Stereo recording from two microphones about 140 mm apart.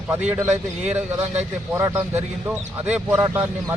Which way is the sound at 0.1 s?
15° right (ahead or behind).